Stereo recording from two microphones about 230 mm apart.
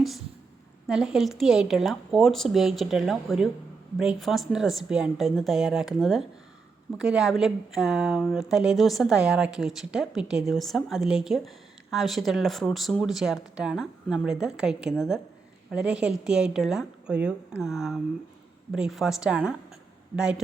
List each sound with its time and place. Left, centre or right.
0.9 s speech: centre